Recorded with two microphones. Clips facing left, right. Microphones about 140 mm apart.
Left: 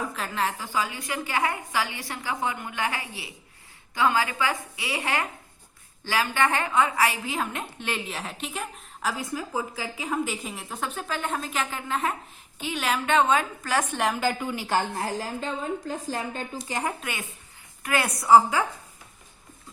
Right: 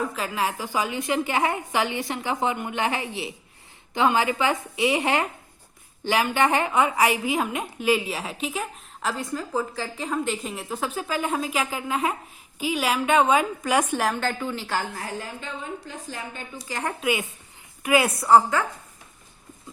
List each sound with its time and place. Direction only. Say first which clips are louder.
0.1 s a woman's voice: right 2 dB; 5° right (ahead or behind)
14.0 s a woman's voice: even; 5° left (ahead or behind); by 15.1 s 25° left (ahead or behind)
15.2 s a woman's voice: left 4 dB; 40° left (ahead or behind)
16.6 s a woman's voice: right 1 dB; 15° left (ahead or behind)
17.0 s a woman's voice: right 9 dB; 10° right (ahead or behind)